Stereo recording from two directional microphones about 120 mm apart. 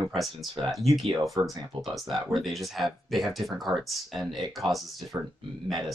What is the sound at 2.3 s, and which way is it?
A woman's voice, centre (ahead or behind).